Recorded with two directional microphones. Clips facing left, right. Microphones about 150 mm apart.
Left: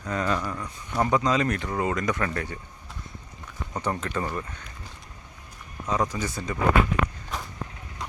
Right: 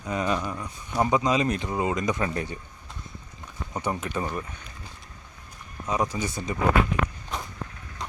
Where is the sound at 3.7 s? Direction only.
10° right (ahead or behind).